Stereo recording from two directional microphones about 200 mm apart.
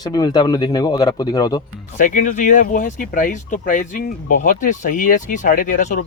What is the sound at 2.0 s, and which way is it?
Speech, 40° left (ahead or behind).